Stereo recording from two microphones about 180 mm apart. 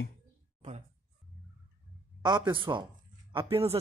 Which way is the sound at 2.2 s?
25° right (ahead or behind).